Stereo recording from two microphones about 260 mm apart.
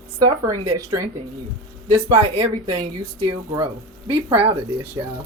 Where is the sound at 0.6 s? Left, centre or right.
Centre.